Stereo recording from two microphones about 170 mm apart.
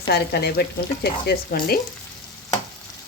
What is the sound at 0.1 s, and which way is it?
Speech, 75° left (ahead or behind).